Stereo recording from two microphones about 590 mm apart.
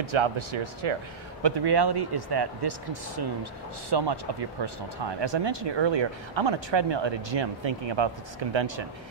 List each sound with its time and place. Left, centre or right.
0.1 s speech: right
1.4 s speech: right